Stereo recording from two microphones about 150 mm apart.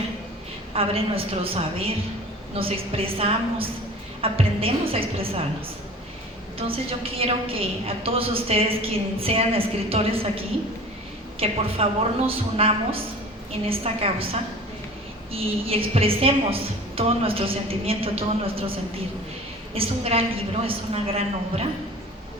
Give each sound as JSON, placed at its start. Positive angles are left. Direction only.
{"t": 0.7, "sound": "a woman's voice", "side_deg": -40}
{"t": 6.6, "sound": "a woman's voice", "side_deg": -40}
{"t": 15.3, "sound": "a woman's voice", "side_deg": -40}
{"t": 19.7, "sound": "a woman's voice", "side_deg": -40}